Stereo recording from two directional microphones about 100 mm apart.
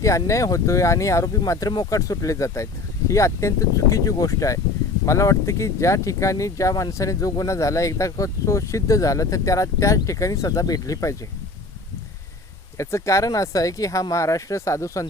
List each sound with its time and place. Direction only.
0.0 s speech: 30° left (ahead or behind)
1.7 s speech: 45° left (ahead or behind)
2.0 s speech: 35° left (ahead or behind)
12.7 s speech: 30° left (ahead or behind)